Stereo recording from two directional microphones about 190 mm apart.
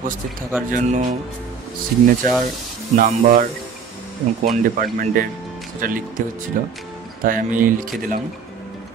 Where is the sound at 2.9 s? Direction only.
45° right (ahead or behind).